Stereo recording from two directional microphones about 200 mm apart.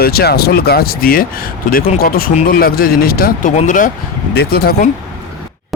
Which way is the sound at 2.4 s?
50° left (ahead or behind).